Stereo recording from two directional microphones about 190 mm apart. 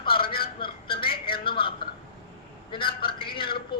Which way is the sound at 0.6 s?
25° left (ahead or behind).